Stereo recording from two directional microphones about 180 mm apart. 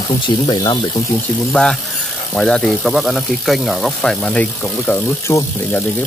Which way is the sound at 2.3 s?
5° left (ahead or behind).